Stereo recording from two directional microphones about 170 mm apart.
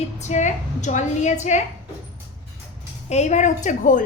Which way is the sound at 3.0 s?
40° left (ahead or behind).